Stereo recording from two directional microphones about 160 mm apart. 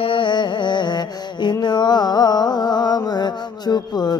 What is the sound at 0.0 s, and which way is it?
Music, 30° left (ahead or behind).